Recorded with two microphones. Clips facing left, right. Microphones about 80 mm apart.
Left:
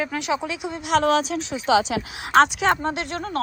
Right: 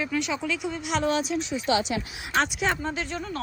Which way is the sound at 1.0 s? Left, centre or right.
Left.